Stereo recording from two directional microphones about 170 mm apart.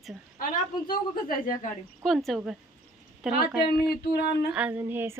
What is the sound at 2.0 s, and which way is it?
Speech, centre (ahead or behind).